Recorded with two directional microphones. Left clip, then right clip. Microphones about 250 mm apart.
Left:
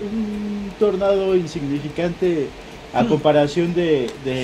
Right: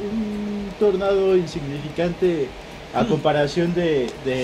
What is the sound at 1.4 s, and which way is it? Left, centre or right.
A man's voice, left.